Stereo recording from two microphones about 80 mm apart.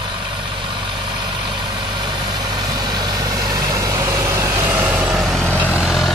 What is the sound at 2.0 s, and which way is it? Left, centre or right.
Vehicle, right.